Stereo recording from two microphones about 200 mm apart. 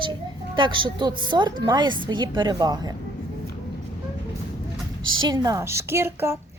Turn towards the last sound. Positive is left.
turn(degrees=-10)  # may be behind; listen again after turning